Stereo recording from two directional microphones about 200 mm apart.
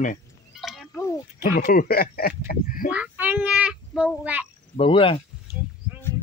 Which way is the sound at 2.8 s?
5° right (ahead or behind).